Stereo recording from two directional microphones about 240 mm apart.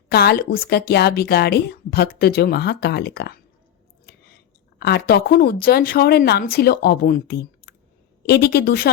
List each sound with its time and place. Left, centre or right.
0.1 s speech: left
4.8 s speech: left